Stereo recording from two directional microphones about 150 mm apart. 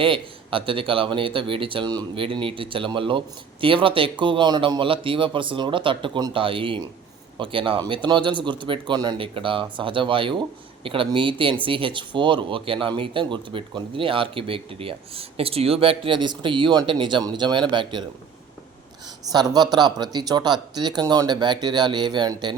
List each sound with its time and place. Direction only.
0.0 s speech: 35° right (ahead or behind)
19.3 s speech: 25° right (ahead or behind)